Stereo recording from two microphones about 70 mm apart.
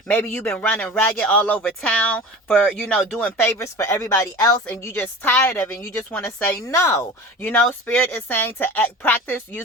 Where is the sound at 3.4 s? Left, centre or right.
Left.